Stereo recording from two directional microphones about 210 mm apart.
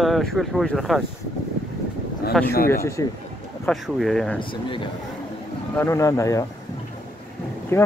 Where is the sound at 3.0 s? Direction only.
15° left (ahead or behind).